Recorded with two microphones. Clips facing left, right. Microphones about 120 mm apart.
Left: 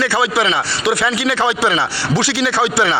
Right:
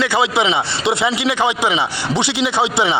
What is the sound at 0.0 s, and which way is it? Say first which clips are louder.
Speech: even; 20° right (ahead or behind).